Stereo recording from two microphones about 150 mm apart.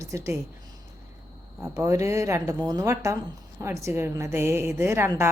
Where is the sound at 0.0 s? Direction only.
20° right (ahead or behind).